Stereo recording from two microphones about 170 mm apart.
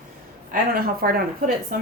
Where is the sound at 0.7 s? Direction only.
60° right (ahead or behind).